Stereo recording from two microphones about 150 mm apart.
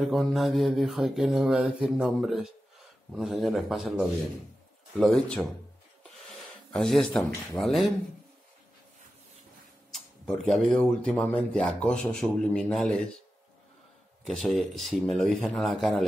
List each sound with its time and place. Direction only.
0.0 s speech: centre (ahead or behind)
5.0 s speech: 5° left (ahead or behind)
6.7 s speech: 5° left (ahead or behind)
9.9 s speech: 5° left (ahead or behind)
14.2 s speech: centre (ahead or behind)